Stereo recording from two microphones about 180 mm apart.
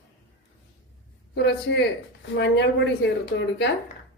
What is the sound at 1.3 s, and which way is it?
Speech, 75° left (ahead or behind).